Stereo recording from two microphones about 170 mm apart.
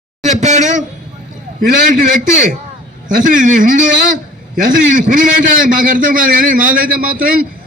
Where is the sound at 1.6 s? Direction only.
55° right (ahead or behind).